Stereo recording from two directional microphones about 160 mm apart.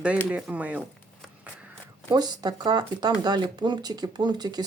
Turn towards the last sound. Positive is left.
turn(degrees=-25)  # may be behind; listen again after turning